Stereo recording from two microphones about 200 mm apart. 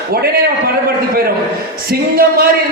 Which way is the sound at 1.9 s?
50° right (ahead or behind).